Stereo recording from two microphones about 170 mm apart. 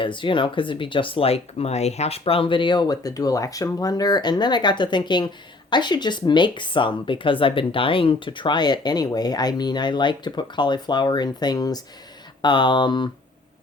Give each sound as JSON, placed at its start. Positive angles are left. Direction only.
{"t": 0.0, "sound": "speech", "side_deg": 30}